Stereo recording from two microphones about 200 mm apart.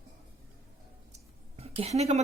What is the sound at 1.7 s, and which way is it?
Speech, 30° right (ahead or behind).